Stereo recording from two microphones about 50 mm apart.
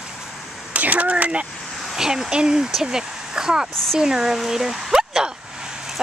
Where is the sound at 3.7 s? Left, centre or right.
Centre.